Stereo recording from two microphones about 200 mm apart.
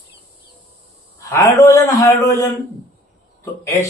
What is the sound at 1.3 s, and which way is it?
Speech, 15° left (ahead or behind).